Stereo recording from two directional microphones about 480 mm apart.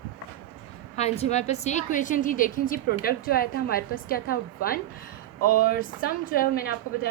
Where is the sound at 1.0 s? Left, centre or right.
Centre.